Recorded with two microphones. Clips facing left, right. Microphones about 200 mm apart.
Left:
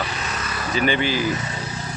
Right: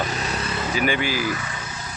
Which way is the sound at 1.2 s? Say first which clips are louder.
Left 3 dB; 20° left (ahead or behind).